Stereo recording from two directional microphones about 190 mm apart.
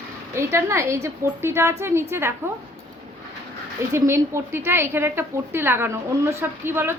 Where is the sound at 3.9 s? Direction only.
15° right (ahead or behind).